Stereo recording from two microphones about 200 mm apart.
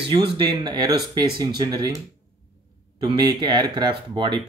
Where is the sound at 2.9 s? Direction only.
20° right (ahead or behind).